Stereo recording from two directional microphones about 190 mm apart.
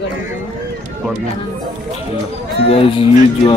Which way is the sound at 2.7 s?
30° left (ahead or behind).